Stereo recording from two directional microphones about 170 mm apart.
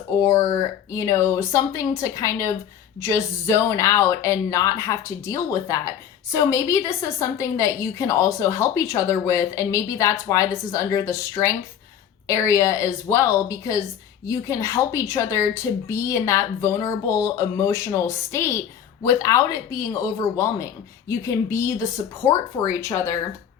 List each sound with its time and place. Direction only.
0.2 s a woman's voice: 20° left (ahead or behind)